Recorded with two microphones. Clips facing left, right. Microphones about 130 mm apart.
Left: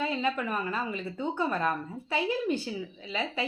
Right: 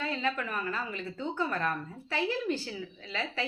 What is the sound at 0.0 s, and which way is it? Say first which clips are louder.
A woman's voice: left 3 dB; 20° left (ahead or behind).